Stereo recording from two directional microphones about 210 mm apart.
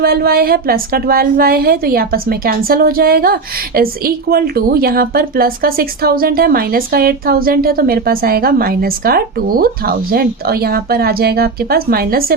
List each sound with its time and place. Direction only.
0.0 s a woman's voice: 45° right (ahead or behind)